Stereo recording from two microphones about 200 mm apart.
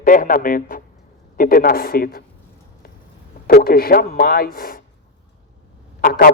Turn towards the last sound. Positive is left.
turn(degrees=45)  # may be behind; listen again after turning